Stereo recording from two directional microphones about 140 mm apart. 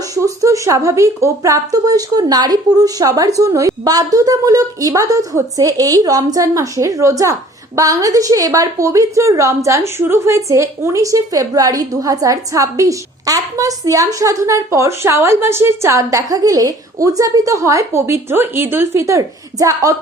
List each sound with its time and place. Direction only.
0.1 s a woman's voice: 25° right (ahead or behind)